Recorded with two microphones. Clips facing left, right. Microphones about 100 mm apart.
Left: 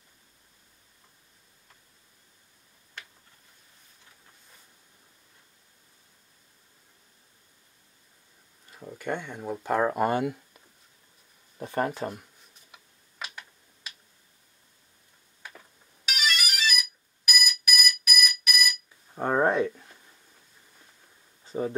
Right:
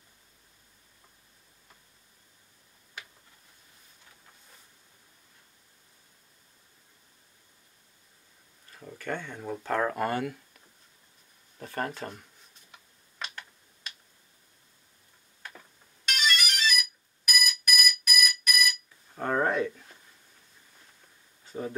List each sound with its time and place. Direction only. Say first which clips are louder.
8.6 s speech: left 3 dB; 15° left (ahead or behind)
11.5 s speech: left 5 dB; 20° left (ahead or behind)
12.7 s tick-tock: even; 5° left (ahead or behind)
16.1 s ringtone: even; 5° left (ahead or behind)
19.1 s a sound: left 3 dB; 15° left (ahead or behind)